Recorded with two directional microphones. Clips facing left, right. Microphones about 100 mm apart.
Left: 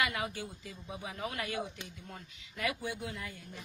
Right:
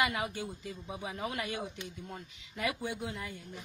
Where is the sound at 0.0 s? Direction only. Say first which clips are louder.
Right 2 dB; 25° right (ahead or behind).